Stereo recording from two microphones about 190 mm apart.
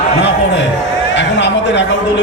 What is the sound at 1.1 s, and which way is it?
Speech, 65° left (ahead or behind).